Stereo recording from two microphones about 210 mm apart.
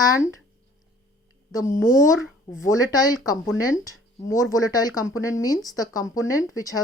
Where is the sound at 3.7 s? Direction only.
15° left (ahead or behind).